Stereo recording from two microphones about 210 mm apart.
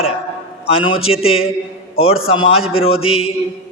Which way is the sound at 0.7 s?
25° left (ahead or behind).